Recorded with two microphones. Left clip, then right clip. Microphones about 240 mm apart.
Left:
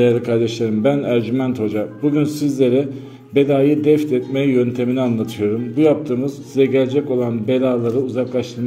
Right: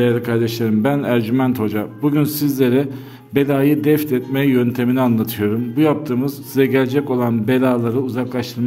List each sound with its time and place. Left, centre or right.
0.0 s a man's voice: centre